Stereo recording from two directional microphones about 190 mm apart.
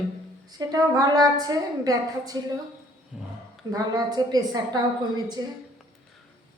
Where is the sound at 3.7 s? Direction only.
20° right (ahead or behind).